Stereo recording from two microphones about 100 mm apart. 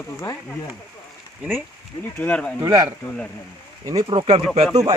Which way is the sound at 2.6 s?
40° right (ahead or behind).